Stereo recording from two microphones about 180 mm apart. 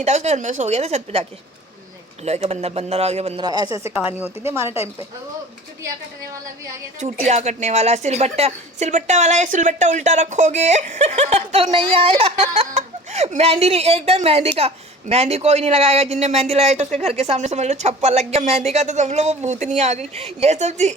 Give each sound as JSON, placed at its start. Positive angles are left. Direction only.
{"t": 0.0, "sound": "a woman's voice", "side_deg": -40}
{"t": 3.4, "sound": "a woman's voice", "side_deg": -20}
{"t": 4.0, "sound": "a woman's voice", "side_deg": -10}
{"t": 7.3, "sound": "a woman's voice", "side_deg": -40}